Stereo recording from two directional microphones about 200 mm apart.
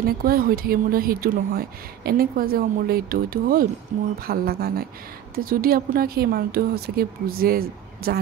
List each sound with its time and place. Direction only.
0.0 s speech: 45° right (ahead or behind)